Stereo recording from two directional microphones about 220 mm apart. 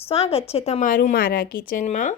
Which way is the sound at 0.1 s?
25° left (ahead or behind).